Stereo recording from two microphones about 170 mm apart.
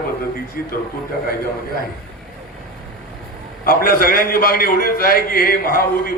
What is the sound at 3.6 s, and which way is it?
A man's voice, 60° left (ahead or behind).